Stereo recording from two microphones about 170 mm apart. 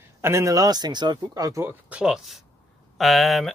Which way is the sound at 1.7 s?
5° right (ahead or behind).